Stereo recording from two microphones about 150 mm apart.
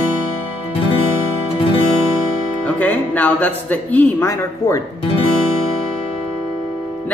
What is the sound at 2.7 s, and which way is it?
Music, 10° left (ahead or behind).